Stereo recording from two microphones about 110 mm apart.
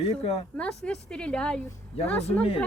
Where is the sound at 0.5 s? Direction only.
5° left (ahead or behind).